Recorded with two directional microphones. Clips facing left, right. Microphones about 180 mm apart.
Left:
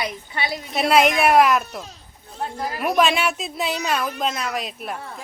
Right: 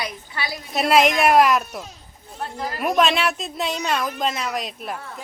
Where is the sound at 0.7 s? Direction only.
Centre (ahead or behind).